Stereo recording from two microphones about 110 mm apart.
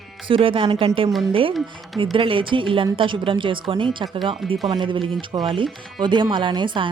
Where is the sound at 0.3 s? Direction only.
55° right (ahead or behind).